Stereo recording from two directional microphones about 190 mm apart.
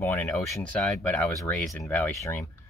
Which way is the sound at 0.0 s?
10° left (ahead or behind).